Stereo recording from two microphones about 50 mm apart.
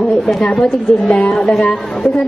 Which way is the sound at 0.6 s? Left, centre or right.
Centre.